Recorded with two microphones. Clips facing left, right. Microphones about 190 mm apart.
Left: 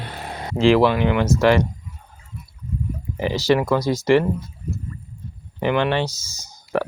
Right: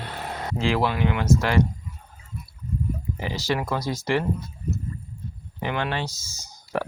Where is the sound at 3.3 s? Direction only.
80° left.